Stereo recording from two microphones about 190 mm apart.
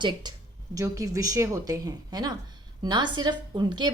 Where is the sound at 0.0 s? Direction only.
25° right (ahead or behind).